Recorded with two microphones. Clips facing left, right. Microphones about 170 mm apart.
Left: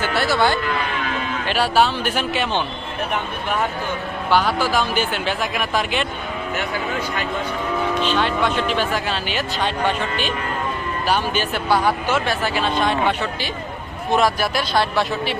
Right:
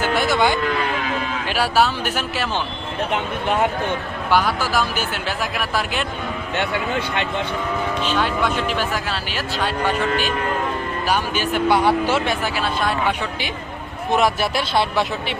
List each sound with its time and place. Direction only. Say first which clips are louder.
0.0 s speech: right 1 dB; 15° right (ahead or behind)
4.3 s speech: left 1 dB; 10° right (ahead or behind)
8.0 s speech: right 1 dB; 10° right (ahead or behind)
11.1 s speech: even; 10° right (ahead or behind)
11.7 s speech: right 1 dB; 25° right (ahead or behind)
12.6 s speech: left 2 dB; 5° right (ahead or behind)
14.1 s speech: even; 25° right (ahead or behind)